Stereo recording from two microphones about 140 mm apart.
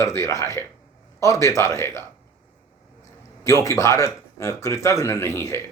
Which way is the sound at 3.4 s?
20° left (ahead or behind).